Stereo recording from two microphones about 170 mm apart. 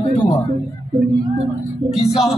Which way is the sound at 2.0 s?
40° left (ahead or behind).